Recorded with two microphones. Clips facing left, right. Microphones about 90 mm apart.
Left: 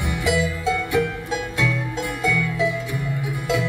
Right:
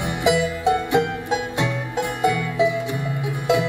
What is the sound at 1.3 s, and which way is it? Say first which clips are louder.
Music: right 1 dB; 20° right (ahead or behind).